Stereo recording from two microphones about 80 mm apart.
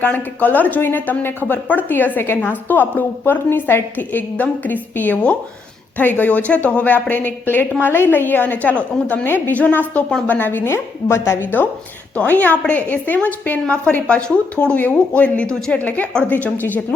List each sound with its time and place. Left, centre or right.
0.0 s speech: left
12.1 s a woman's voice: centre